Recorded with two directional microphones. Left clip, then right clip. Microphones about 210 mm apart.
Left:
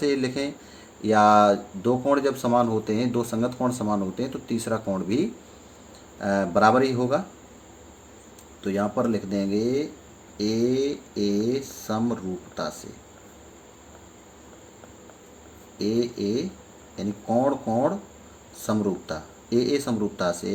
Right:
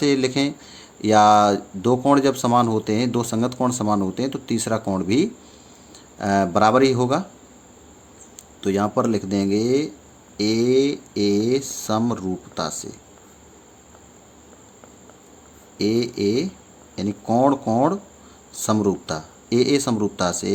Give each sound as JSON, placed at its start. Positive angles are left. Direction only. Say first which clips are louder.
{"t": 0.0, "sound": "speech", "louder": "right 5 dB", "side_deg": -40}
{"t": 8.6, "sound": "speech", "louder": "right 4 dB", "side_deg": -40}
{"t": 15.8, "sound": "speech", "louder": "right 5 dB", "side_deg": -40}